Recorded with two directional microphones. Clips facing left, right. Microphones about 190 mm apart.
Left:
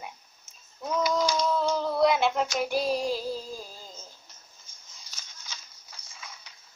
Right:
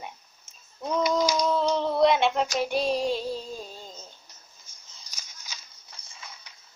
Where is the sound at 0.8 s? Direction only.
25° right (ahead or behind).